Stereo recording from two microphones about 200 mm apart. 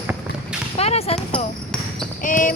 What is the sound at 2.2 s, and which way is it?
Basketball bounce, 40° left (ahead or behind).